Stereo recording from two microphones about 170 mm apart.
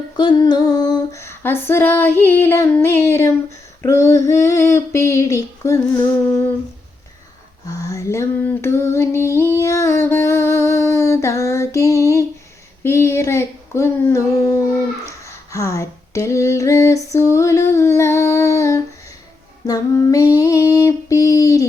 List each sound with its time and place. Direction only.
0.2 s female singing: 25° left (ahead or behind)
7.7 s female singing: 20° left (ahead or behind)
12.8 s a sound: 15° left (ahead or behind)
19.6 s female singing: 20° left (ahead or behind)